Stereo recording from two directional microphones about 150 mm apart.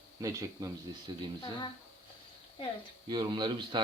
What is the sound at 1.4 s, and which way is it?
Speech, 30° left (ahead or behind).